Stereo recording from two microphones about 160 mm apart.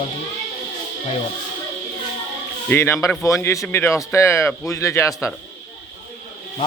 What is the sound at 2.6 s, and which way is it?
Speech, 15° left (ahead or behind).